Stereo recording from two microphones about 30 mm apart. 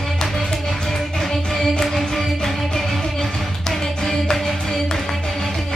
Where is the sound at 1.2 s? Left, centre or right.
Centre.